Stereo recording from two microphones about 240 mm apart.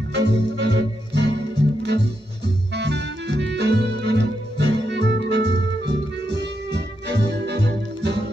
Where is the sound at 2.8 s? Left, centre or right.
Right.